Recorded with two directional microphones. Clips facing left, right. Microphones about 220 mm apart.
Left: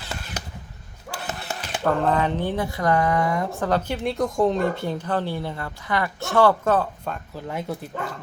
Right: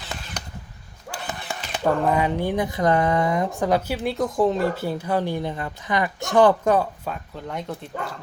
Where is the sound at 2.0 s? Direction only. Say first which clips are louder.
Right 1 dB; 10° right (ahead or behind).